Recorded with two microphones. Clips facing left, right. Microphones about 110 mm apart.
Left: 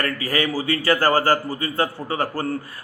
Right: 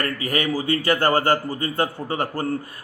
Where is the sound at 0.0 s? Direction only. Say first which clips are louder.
Left 1 dB; 20° right (ahead or behind).